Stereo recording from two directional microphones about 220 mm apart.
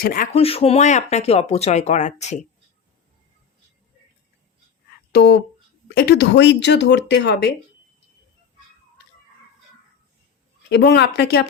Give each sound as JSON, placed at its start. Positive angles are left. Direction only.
{"t": 0.0, "sound": "speech", "side_deg": 40}
{"t": 0.3, "sound": "speech", "side_deg": 25}
{"t": 5.1, "sound": "speech", "side_deg": 50}
{"t": 10.7, "sound": "speech", "side_deg": 50}